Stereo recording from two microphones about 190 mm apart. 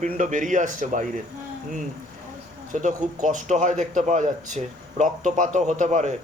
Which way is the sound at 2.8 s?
40° right (ahead or behind).